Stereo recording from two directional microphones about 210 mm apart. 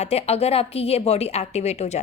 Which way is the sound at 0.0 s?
30° left (ahead or behind).